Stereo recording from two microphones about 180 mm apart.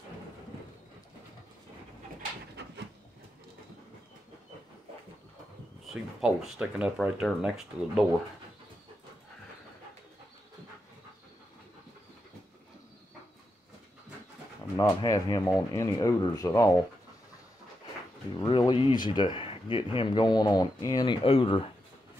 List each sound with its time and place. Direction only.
2.6 s a sound: 65° right (ahead or behind)
6.2 s speech: 5° right (ahead or behind)
14.8 s speech: 20° left (ahead or behind)
18.4 s speech: 20° left (ahead or behind)